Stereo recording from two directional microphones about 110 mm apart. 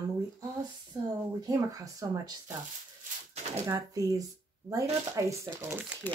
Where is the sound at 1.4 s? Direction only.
30° right (ahead or behind).